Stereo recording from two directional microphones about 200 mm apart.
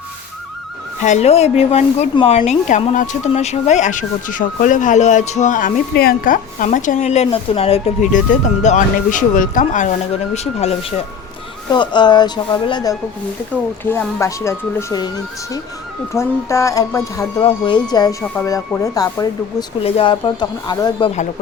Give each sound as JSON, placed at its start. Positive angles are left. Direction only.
{"t": 1.0, "sound": "speech", "side_deg": 35}
{"t": 16.1, "sound": "speech", "side_deg": 15}